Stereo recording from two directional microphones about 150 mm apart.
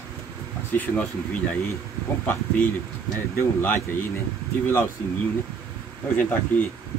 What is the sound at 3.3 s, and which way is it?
Speech, 15° left (ahead or behind).